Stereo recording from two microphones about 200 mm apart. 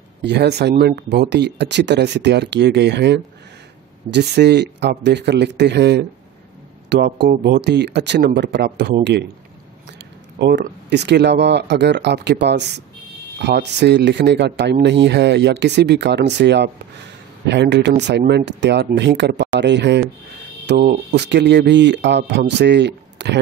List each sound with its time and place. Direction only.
0.2 s speech: 55° right (ahead or behind)
10.4 s speech: 60° right (ahead or behind)